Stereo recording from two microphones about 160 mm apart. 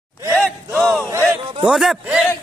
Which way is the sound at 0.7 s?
5° left (ahead or behind).